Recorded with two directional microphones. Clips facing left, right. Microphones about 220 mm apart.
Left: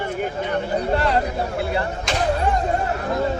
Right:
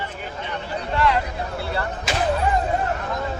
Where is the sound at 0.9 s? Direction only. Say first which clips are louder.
Even; 40° left (ahead or behind).